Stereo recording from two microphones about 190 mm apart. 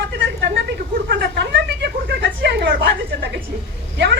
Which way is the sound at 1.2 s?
60° right (ahead or behind).